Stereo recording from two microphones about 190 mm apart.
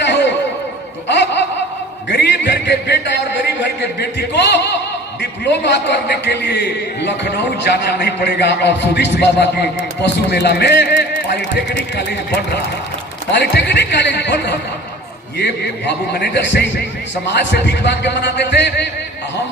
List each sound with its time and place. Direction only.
0.0 s music: 65° left (ahead or behind)
1.0 s laughter: 65° left (ahead or behind)
2.0 s music: 65° left (ahead or behind)
3.6 s a sound: 65° left (ahead or behind)
5.2 s a man's voice: 65° left (ahead or behind)
13.4 s a man's voice: 60° left (ahead or behind)